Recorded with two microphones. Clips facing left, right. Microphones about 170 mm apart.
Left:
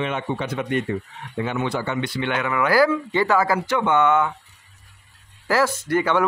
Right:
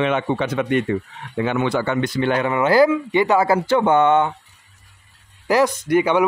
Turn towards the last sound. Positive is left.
turn(degrees=-15)  # may be behind; listen again after turning